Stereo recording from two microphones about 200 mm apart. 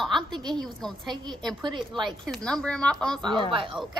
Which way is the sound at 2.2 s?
5° left (ahead or behind).